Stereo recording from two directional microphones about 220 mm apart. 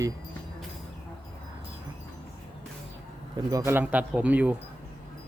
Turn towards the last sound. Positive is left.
turn(degrees=-5)  # may be behind; listen again after turning